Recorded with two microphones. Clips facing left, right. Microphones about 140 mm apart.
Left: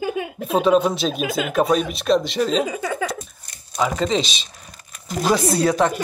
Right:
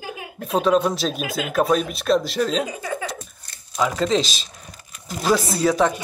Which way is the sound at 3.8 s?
Centre (ahead or behind).